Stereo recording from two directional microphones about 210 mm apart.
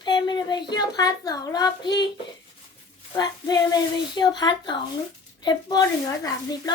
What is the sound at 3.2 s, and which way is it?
Speech, 20° left (ahead or behind).